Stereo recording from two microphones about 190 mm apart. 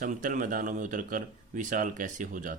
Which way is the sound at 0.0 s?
45° right (ahead or behind).